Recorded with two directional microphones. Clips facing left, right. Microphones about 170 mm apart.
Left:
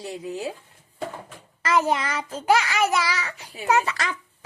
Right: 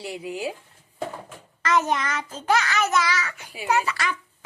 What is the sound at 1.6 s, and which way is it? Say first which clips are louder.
A child's voice: left 1 dB; 30° left (ahead or behind).